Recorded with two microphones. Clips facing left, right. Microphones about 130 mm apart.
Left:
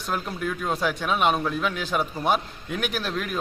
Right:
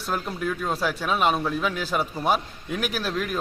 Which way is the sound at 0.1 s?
Centre (ahead or behind).